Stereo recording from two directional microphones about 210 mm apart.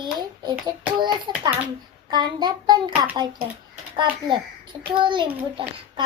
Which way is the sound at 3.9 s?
20° right (ahead or behind).